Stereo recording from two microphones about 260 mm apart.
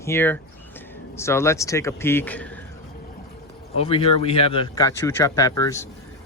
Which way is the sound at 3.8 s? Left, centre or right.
Left.